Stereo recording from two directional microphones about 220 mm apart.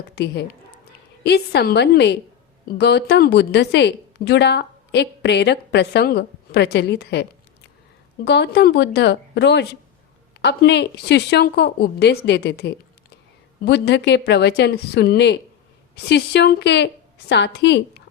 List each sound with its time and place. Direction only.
0.2 s a woman's voice: 45° left (ahead or behind)